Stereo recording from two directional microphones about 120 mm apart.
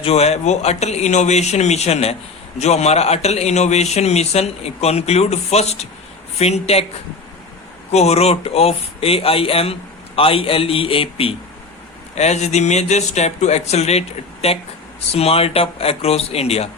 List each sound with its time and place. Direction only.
0.0 s a man's voice: 60° left (ahead or behind)
7.9 s a man's voice: 60° left (ahead or behind)
12.1 s speech: 70° left (ahead or behind)
15.1 s a man's voice: 55° left (ahead or behind)